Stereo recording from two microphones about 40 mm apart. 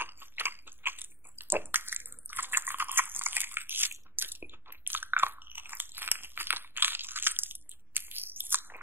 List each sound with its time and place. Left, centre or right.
0.0 s chewing: right